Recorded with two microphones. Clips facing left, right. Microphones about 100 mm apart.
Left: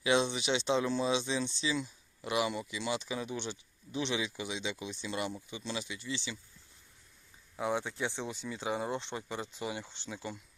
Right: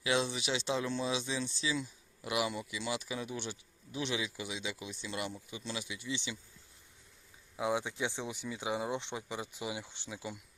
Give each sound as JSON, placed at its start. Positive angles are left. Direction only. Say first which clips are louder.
{"t": 0.0, "sound": "speech", "louder": "left 3 dB", "side_deg": 0}
{"t": 7.5, "sound": "speech", "louder": "even", "side_deg": -10}